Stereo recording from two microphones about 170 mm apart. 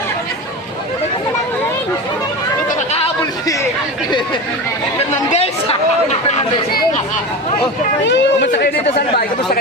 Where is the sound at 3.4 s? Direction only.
20° left (ahead or behind).